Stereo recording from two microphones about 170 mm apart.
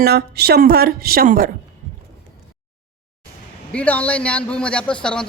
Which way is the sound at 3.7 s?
10° left (ahead or behind).